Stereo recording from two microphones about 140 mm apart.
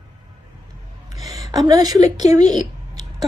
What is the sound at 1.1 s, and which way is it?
Speech, 25° right (ahead or behind).